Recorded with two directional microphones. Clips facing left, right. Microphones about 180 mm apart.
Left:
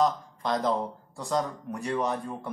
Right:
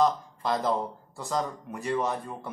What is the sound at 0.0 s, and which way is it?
Speech, 5° right (ahead or behind).